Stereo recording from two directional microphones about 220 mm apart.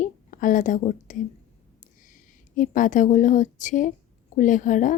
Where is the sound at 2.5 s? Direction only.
35° left (ahead or behind).